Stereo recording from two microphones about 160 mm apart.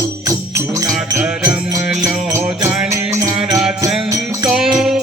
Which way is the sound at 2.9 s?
20° right (ahead or behind).